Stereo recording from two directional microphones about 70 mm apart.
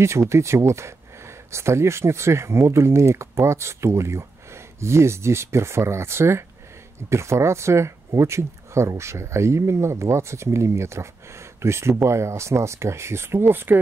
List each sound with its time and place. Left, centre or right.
0.0 s speech: right